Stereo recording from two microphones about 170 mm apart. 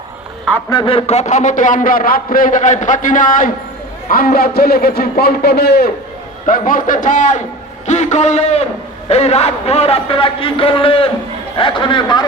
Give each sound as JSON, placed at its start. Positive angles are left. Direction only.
{"t": 0.7, "sound": "a man's voice", "side_deg": 25}
{"t": 6.4, "sound": "a man's voice", "side_deg": 55}